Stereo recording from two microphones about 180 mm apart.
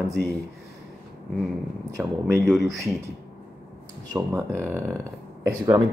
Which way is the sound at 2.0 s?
10° right (ahead or behind).